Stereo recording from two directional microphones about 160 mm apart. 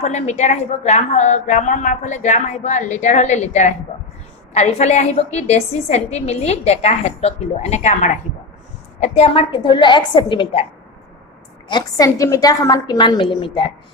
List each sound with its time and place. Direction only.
0.0 s a woman's voice: 45° left (ahead or behind)
11.7 s a woman's voice: 20° left (ahead or behind)